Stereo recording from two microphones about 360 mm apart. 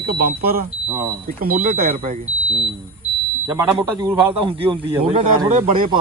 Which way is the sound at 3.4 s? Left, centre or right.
Centre.